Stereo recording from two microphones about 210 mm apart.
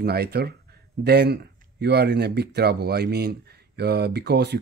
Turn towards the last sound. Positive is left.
turn(degrees=-50)  # may be behind; listen again after turning